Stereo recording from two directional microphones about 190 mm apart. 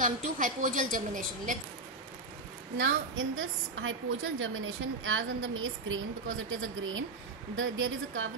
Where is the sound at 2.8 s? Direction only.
90° right.